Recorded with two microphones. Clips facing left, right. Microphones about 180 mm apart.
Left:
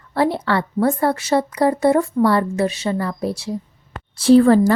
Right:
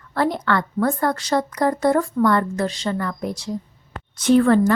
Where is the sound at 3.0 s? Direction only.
30° left (ahead or behind).